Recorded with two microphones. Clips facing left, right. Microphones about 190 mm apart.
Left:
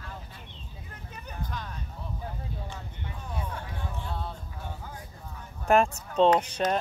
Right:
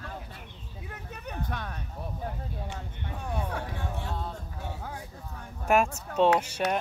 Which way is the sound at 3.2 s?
65° right (ahead or behind).